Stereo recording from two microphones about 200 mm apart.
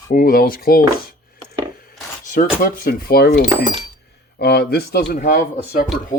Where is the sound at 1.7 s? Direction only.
45° left (ahead or behind).